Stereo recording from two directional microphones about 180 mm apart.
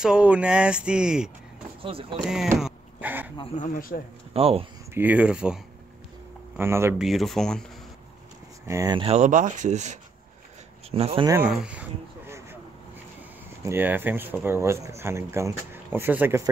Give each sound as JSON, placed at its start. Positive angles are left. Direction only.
{"t": 0.0, "sound": "speech", "side_deg": -5}
{"t": 1.8, "sound": "speech", "side_deg": -30}
{"t": 2.1, "sound": "speech", "side_deg": 0}
{"t": 3.5, "sound": "speech", "side_deg": 45}
{"t": 4.3, "sound": "speech", "side_deg": -35}
{"t": 4.9, "sound": "speech", "side_deg": -10}
{"t": 7.0, "sound": "speech", "side_deg": 0}
{"t": 8.6, "sound": "speech", "side_deg": -20}
{"t": 11.4, "sound": "speech", "side_deg": -5}
{"t": 13.7, "sound": "speech", "side_deg": -10}